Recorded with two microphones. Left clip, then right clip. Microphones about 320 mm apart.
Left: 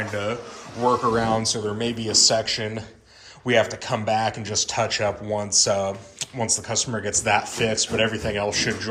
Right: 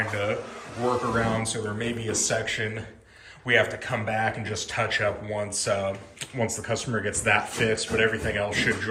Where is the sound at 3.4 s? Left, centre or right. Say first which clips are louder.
Left 2 dB; centre.